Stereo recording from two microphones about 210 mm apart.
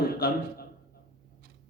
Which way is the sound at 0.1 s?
45° left (ahead or behind).